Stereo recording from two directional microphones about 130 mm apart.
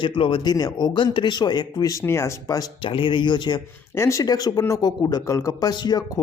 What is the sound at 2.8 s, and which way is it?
Speech, 40° left (ahead or behind).